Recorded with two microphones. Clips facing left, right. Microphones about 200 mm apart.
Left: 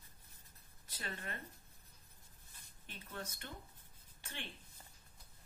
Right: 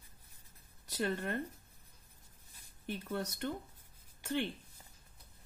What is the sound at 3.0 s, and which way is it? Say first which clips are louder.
Speech: right 9 dB; 65° right (ahead or behind).